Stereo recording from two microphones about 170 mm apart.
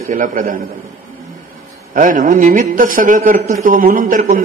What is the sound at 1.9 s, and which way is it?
A man's voice, 50° right (ahead or behind).